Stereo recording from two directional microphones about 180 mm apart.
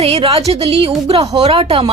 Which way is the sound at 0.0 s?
35° right (ahead or behind).